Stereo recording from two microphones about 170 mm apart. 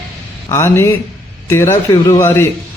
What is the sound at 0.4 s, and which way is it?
A man's voice, 15° left (ahead or behind).